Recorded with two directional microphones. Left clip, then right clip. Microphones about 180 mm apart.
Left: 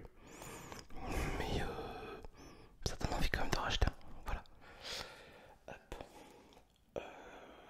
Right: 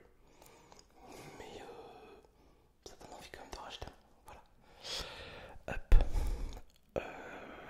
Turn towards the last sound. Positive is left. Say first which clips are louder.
# right 6 dB
turn(degrees=-25)  # may be behind; listen again after turning